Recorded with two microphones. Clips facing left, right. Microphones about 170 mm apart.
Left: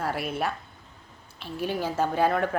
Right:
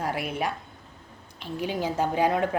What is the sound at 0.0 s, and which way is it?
A woman's voice, 10° right (ahead or behind).